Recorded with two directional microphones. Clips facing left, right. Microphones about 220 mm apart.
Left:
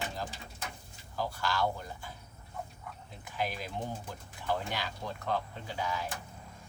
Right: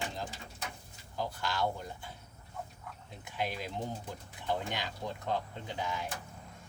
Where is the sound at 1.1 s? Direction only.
20° right (ahead or behind).